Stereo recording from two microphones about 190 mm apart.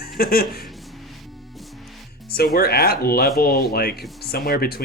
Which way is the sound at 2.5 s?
55° left (ahead or behind).